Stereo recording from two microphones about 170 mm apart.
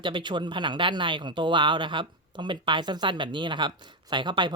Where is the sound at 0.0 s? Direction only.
25° right (ahead or behind).